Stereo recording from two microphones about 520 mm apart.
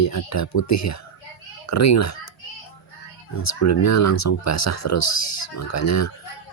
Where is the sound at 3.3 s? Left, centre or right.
Left.